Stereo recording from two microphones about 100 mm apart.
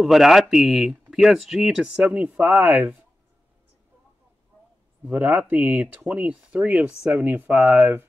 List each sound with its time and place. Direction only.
0.0 s speech: centre (ahead or behind)
5.0 s speech: 15° right (ahead or behind)